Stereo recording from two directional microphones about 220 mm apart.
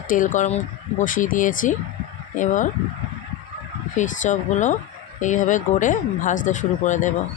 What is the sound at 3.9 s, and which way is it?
Speech, 35° left (ahead or behind).